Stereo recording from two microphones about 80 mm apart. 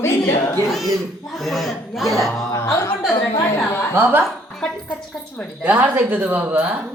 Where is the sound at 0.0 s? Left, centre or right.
Left.